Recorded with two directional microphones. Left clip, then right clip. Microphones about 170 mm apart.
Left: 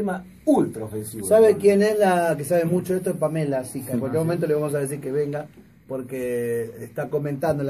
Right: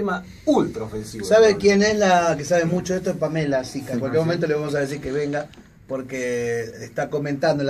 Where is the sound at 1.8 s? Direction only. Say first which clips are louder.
Right 2 dB; 55° left (ahead or behind).